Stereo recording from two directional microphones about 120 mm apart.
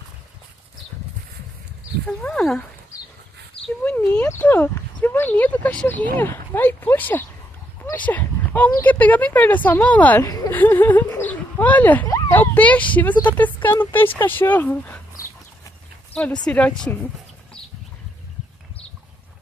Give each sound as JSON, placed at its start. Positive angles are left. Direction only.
{"t": 2.0, "sound": "speech", "side_deg": 5}
{"t": 3.8, "sound": "speech", "side_deg": 10}
{"t": 7.9, "sound": "a sound", "side_deg": 15}
{"t": 8.8, "sound": "speech", "side_deg": 15}
{"t": 10.2, "sound": "speech", "side_deg": 30}
{"t": 10.5, "sound": "speech", "side_deg": 15}
{"t": 11.1, "sound": "bird", "side_deg": 15}
{"t": 12.3, "sound": "speech", "side_deg": 15}
{"t": 16.4, "sound": "speech", "side_deg": 10}